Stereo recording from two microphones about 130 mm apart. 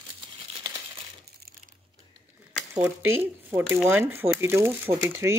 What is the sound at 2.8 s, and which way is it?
Speech, 15° right (ahead or behind).